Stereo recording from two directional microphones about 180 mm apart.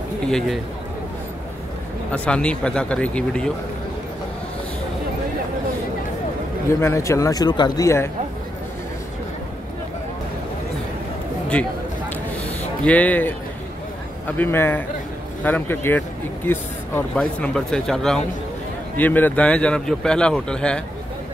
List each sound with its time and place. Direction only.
0.3 s speech: centre (ahead or behind)
2.1 s speech: 5° left (ahead or behind)
6.8 s speech: 15° left (ahead or behind)
11.5 s speech: 5° left (ahead or behind)
12.8 s speech: 10° left (ahead or behind)